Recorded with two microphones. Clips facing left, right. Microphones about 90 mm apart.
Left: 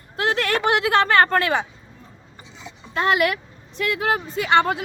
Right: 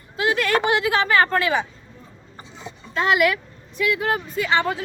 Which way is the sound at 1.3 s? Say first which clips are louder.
Left 1 dB; 50° left (ahead or behind).